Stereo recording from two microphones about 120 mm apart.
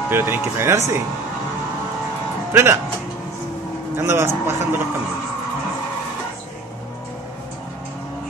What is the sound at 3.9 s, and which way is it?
Speech, 20° right (ahead or behind).